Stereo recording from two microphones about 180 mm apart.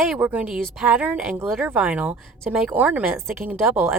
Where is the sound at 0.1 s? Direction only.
5° right (ahead or behind).